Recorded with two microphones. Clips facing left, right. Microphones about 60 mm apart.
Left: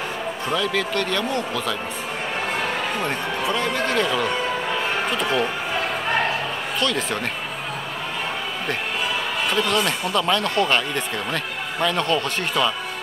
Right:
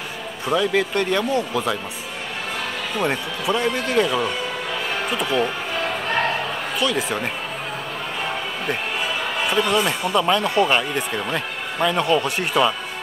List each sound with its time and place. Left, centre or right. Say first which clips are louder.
0.5 s a man's voice: right 4 dB; right
3.0 s speech: right 1 dB; centre
4.0 s speech: even; centre
6.8 s speech: right 2 dB; centre
9.4 s speech: right 2 dB; centre